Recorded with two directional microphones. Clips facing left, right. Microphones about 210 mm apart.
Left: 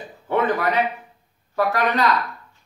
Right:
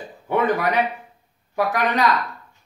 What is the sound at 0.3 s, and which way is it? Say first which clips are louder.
Speech: even; 15° right (ahead or behind).